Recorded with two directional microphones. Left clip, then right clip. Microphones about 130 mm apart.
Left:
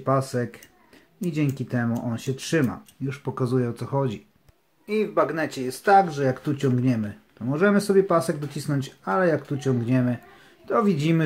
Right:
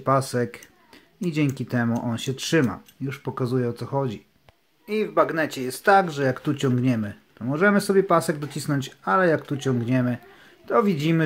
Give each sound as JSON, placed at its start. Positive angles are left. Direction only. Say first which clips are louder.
{"t": 0.0, "sound": "speech", "louder": "right 2 dB", "side_deg": -30}